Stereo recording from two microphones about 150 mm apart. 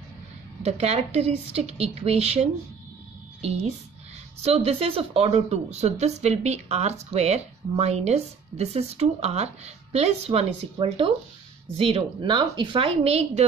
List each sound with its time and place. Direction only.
0.6 s a woman's voice: 45° right (ahead or behind)